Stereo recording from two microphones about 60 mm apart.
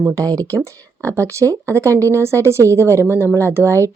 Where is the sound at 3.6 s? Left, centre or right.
Left.